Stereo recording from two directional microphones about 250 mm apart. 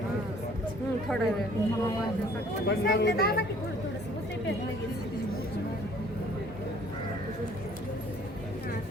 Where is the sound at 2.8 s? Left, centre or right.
Left.